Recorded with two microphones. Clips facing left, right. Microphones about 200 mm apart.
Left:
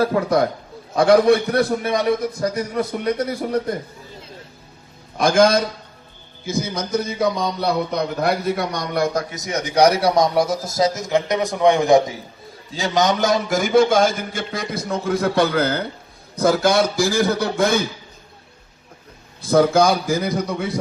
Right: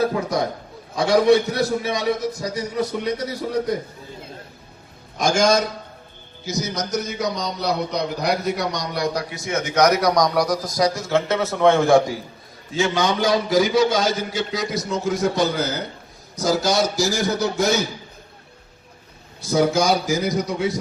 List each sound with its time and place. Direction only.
0.9 s a man's voice: 55° left (ahead or behind)
5.1 s a man's voice: 55° left (ahead or behind); by 12.1 s 20° left (ahead or behind)
12.7 s a man's voice: 40° left (ahead or behind); by 17.8 s 55° left (ahead or behind)
19.4 s a man's voice: 55° left (ahead or behind)